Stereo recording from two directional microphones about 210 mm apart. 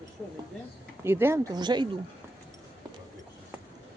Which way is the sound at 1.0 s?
10° right (ahead or behind).